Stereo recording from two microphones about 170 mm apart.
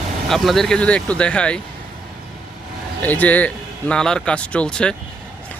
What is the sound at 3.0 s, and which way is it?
A man's voice, 10° left (ahead or behind).